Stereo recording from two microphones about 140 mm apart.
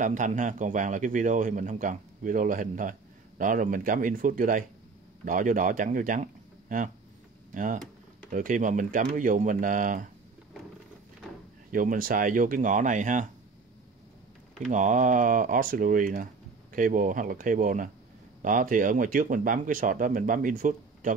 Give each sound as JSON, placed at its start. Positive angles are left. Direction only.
{"t": 0.0, "sound": "a man's voice", "side_deg": -65}
{"t": 7.5, "sound": "a man's voice", "side_deg": -70}
{"t": 11.7, "sound": "a man's voice", "side_deg": -75}
{"t": 14.7, "sound": "a man's voice", "side_deg": -65}